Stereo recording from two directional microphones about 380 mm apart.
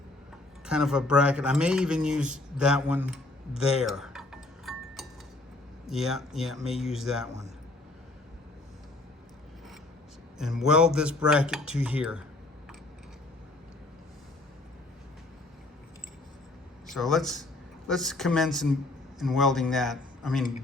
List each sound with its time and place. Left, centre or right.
0.6 s speech: centre
3.8 s tick-tock: centre
5.8 s speech: centre
10.3 s speech: centre
16.8 s a man's voice: centre